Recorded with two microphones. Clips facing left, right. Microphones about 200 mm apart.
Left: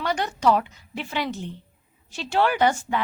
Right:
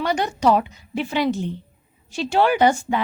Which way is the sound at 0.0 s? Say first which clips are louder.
Right 3 dB; 15° right (ahead or behind).